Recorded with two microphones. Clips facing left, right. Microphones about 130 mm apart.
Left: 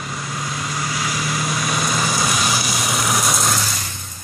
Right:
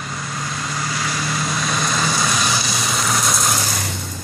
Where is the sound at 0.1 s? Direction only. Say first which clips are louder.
Even; 10° left (ahead or behind).